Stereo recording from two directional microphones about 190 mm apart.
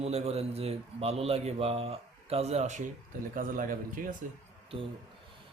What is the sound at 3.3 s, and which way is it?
Speech, 45° right (ahead or behind).